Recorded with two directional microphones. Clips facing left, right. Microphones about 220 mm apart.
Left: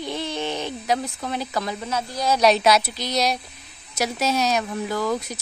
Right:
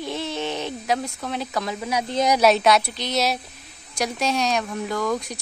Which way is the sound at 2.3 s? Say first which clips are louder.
Left 1 dB; centre (ahead or behind).